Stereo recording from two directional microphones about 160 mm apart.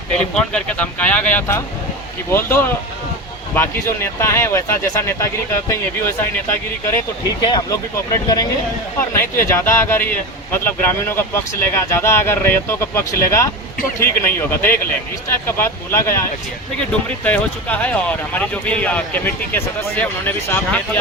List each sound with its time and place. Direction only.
0.3 s speech: 5° left (ahead or behind)